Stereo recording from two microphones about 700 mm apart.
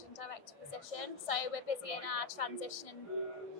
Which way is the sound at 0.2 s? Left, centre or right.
Left.